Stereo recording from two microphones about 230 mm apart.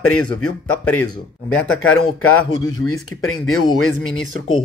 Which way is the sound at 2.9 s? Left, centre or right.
Left.